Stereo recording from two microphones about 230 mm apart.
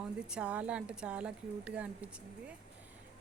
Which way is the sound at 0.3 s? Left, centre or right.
Centre.